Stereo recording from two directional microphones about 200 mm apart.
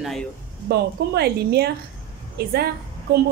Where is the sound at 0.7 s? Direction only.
55° right (ahead or behind).